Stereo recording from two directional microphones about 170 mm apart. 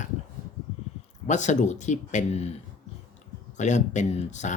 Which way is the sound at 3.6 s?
45° left (ahead or behind).